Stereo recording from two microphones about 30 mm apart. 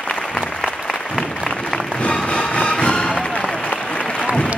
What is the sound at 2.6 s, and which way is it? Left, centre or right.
Music, left.